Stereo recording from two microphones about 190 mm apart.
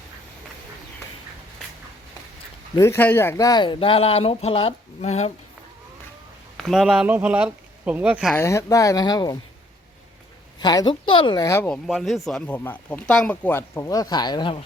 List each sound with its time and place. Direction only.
2.7 s speech: 15° left (ahead or behind); by 5.3 s 35° left (ahead or behind)
6.6 s speech: centre (ahead or behind)
8.4 s speech: 15° left (ahead or behind)
10.6 s speech: 20° left (ahead or behind)
11.9 s speech: centre (ahead or behind); by 14.6 s 25° left (ahead or behind)